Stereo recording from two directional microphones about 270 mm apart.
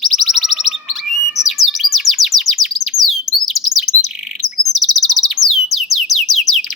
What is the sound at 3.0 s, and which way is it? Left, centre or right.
Chirp, left.